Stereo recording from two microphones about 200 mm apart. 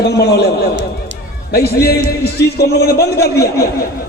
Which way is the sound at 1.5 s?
50° left (ahead or behind).